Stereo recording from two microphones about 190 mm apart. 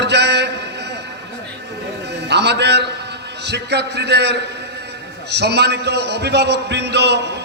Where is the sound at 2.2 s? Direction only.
65° right (ahead or behind).